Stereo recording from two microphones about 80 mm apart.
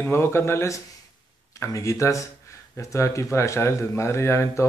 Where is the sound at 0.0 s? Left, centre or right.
Left.